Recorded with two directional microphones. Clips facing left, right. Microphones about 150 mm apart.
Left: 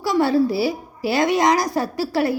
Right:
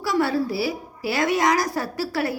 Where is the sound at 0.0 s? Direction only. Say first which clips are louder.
Left 4 dB; 25° left (ahead or behind).